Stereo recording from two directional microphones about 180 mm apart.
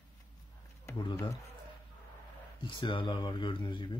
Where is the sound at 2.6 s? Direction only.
25° left (ahead or behind).